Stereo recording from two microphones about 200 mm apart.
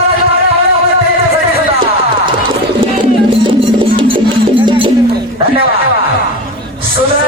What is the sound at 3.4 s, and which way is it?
Music, 25° right (ahead or behind).